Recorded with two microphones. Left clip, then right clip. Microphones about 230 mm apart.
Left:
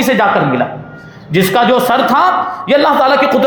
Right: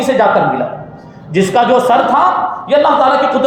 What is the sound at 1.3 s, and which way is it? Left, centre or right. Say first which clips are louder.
A man's voice: even; left.